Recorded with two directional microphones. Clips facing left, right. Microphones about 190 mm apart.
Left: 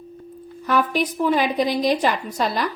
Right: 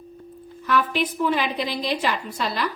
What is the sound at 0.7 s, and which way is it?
A woman's voice, 40° left (ahead or behind).